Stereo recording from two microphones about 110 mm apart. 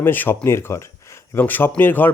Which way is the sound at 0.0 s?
20° left (ahead or behind).